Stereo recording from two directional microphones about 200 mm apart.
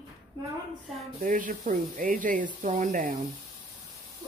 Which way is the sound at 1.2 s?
40° right (ahead or behind).